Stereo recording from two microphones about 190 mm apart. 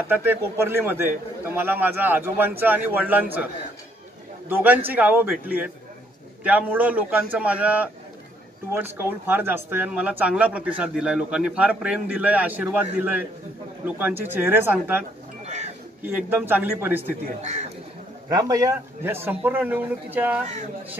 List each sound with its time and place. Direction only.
0.1 s a man's voice: 10° right (ahead or behind)
4.5 s a man's voice: 10° right (ahead or behind)
15.4 s a sound: 35° right (ahead or behind)
16.0 s a man's voice: 10° right (ahead or behind)
17.4 s speech: 35° right (ahead or behind)
18.3 s a man's voice: 20° right (ahead or behind)